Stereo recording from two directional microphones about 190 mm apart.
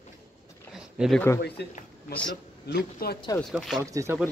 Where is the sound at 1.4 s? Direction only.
60° left (ahead or behind).